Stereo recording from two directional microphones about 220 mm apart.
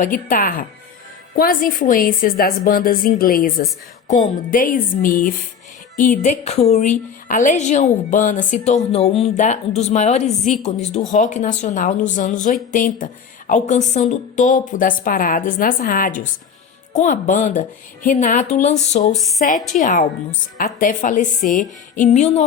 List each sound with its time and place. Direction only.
0.0 s a woman's voice: 40° left (ahead or behind)
4.5 s a woman's voice: 40° left (ahead or behind)
19.1 s speech: centre (ahead or behind)
19.7 s a woman's voice: 35° left (ahead or behind)